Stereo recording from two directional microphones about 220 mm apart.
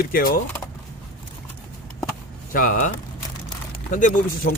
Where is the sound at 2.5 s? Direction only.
40° left (ahead or behind).